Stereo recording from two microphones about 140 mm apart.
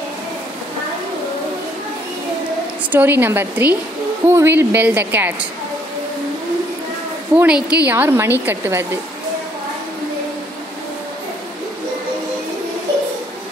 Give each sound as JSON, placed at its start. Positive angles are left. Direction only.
{"t": 2.9, "sound": "a woman's voice", "side_deg": -15}
{"t": 7.3, "sound": "a woman's voice", "side_deg": -10}